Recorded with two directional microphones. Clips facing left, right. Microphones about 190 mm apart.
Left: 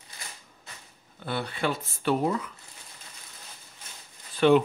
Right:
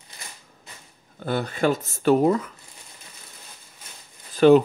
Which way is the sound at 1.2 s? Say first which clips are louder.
Right 7 dB; 45° right (ahead or behind).